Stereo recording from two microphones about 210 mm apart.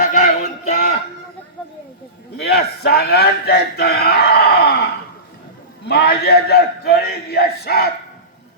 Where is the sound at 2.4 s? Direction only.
50° left (ahead or behind).